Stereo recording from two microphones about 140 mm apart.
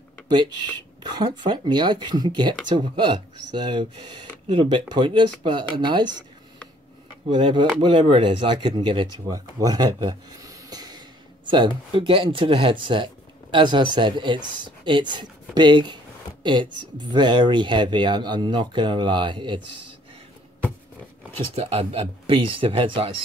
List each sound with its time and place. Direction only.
0.3 s speech: 30° right (ahead or behind)
7.3 s speech: 35° right (ahead or behind)
17.1 s speech: 35° right (ahead or behind)
21.4 s speech: 45° right (ahead or behind)